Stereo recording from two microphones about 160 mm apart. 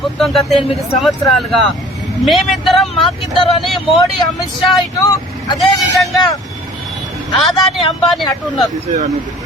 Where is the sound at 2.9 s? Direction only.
35° left (ahead or behind).